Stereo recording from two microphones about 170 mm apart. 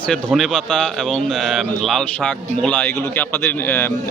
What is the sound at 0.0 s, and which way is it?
A man's voice, 5° left (ahead or behind).